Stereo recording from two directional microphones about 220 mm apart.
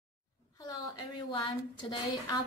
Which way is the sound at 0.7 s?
20° left (ahead or behind).